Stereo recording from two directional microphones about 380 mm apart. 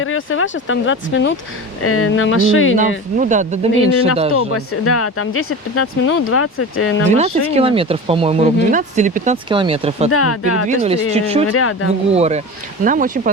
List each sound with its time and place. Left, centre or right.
0.0 s speech: left
3.2 s speech: centre
4.4 s speech: left
7.2 s speech: centre
10.1 s speech: left
10.7 s speech: centre
11.4 s speech: left
12.1 s speech: centre